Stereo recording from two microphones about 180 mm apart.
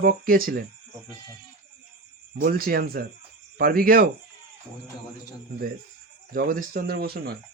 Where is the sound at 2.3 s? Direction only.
55° right (ahead or behind).